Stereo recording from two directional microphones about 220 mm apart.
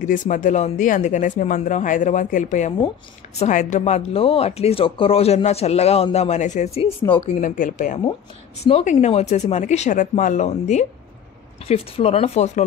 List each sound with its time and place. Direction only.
0.0 s speech: 35° left (ahead or behind)
7.3 s speech: 35° left (ahead or behind)